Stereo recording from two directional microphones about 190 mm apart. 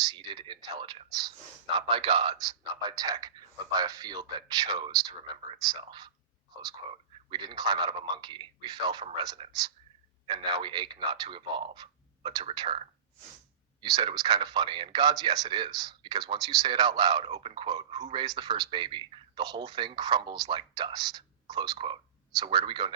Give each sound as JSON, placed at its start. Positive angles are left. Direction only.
{"t": 0.1, "sound": "speech", "side_deg": -25}
{"t": 13.9, "sound": "speech", "side_deg": -25}